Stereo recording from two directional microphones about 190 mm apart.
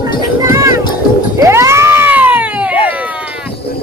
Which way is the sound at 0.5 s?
15° right (ahead or behind).